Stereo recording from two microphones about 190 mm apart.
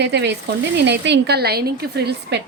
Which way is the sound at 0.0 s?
65° right (ahead or behind).